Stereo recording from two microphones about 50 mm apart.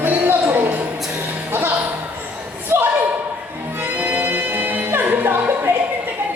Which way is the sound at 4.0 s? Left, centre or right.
Right.